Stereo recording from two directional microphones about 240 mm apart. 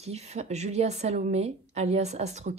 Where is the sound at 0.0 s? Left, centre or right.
Right.